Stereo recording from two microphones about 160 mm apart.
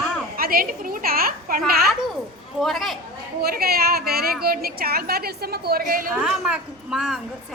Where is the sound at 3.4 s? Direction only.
75° right (ahead or behind).